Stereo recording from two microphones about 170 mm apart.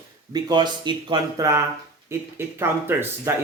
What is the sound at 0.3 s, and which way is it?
Speech, 25° right (ahead or behind).